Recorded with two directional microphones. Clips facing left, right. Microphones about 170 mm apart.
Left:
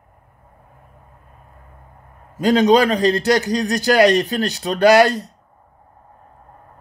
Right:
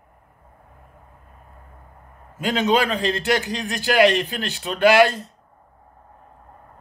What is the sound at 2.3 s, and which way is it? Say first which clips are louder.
Speech: left 7 dB; 40° left (ahead or behind).